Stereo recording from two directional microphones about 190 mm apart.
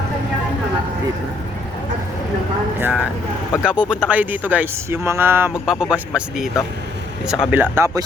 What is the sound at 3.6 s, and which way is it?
Speech, 5° right (ahead or behind).